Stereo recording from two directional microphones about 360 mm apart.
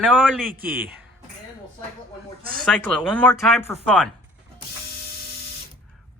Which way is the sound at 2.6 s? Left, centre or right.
Centre.